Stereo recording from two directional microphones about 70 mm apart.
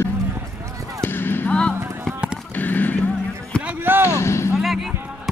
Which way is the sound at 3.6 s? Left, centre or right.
Right.